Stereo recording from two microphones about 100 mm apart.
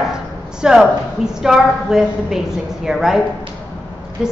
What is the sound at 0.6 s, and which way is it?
A woman's voice, 5° right (ahead or behind).